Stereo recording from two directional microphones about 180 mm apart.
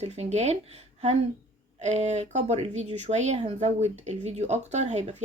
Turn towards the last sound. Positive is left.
turn(degrees=-40)  # may be behind; listen again after turning